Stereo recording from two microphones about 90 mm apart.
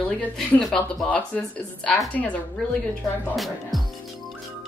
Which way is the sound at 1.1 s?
15° left (ahead or behind).